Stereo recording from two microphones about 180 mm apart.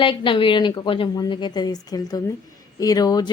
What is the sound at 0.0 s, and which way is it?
A woman's voice, 30° left (ahead or behind).